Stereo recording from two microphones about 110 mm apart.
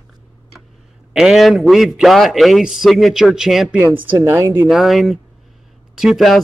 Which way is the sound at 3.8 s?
20° right (ahead or behind).